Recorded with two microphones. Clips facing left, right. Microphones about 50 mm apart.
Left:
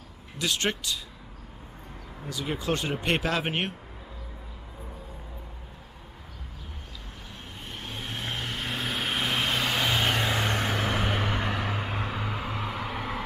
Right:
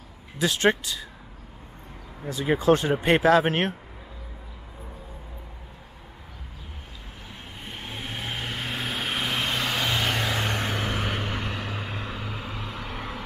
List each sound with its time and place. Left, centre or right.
0.4 s speech: right
2.2 s speech: right
7.6 s vehicle: centre